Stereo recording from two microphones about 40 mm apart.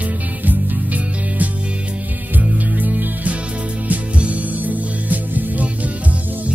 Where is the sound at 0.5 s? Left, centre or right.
Right.